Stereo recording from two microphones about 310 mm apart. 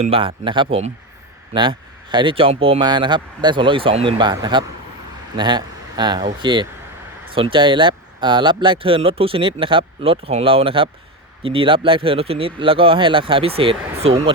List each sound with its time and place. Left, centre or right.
0.0 s speech: centre